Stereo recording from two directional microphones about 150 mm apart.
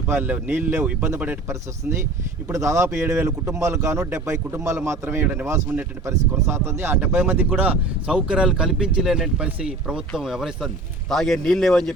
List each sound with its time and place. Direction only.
0.1 s a man's voice: 10° right (ahead or behind)